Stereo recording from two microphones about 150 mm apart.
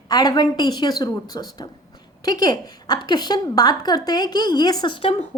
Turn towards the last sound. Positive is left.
turn(degrees=35)  # may be behind; listen again after turning